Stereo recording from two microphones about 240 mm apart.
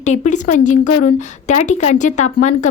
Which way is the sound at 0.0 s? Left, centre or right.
Left.